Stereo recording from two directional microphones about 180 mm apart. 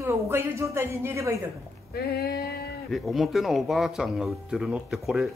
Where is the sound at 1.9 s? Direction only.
60° left (ahead or behind).